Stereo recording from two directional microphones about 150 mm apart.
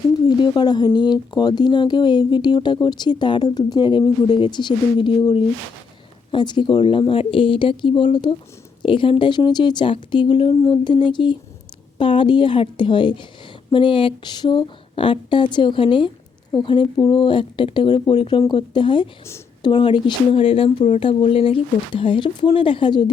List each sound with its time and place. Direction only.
0.3 s speech: 30° left (ahead or behind)